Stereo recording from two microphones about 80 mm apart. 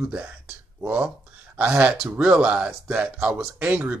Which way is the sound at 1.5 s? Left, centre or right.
Centre.